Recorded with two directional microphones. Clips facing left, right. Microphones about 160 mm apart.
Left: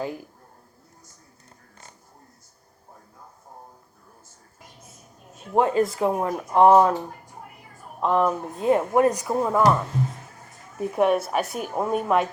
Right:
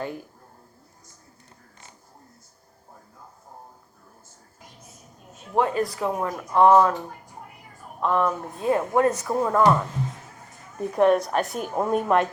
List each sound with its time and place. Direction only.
5.5 s speech: 25° left (ahead or behind)
8.0 s speech: 30° left (ahead or behind)
9.3 s a woman's voice: 5° left (ahead or behind)
10.8 s a woman's voice: 5° left (ahead or behind)